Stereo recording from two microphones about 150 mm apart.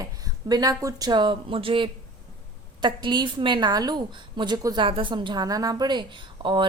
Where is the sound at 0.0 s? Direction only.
25° right (ahead or behind).